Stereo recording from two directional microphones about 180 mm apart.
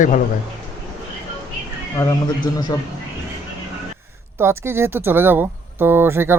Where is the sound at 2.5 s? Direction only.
20° left (ahead or behind).